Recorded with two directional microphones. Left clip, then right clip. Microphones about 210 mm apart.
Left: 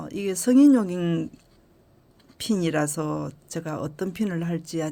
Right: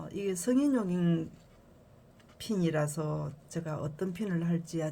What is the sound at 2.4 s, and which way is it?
Speech, 50° left (ahead or behind).